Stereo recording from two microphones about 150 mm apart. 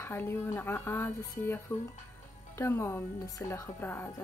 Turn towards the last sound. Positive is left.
turn(degrees=15)  # may be behind; listen again after turning